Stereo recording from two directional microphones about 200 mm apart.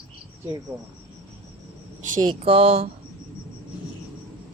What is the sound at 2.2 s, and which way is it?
Speech, 25° right (ahead or behind).